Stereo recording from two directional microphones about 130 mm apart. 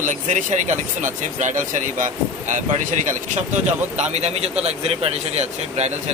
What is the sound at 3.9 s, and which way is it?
A man's voice, 60° right (ahead or behind).